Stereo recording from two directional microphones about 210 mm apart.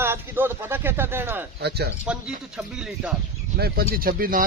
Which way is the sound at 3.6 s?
45° right (ahead or behind).